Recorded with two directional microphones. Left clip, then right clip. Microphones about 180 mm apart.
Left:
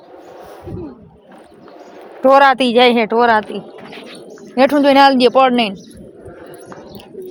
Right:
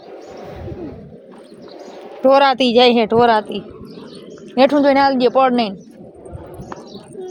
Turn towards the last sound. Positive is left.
turn(degrees=15)  # may be behind; listen again after turning